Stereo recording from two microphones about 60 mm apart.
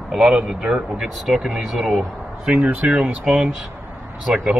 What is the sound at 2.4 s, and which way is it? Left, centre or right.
Speech, centre.